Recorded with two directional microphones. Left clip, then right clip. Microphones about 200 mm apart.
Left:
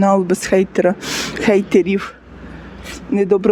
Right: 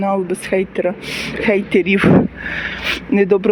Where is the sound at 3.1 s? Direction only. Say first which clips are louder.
Even; 5° left (ahead or behind).